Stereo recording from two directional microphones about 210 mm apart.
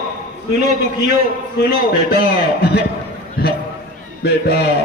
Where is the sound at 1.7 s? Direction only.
45° left (ahead or behind).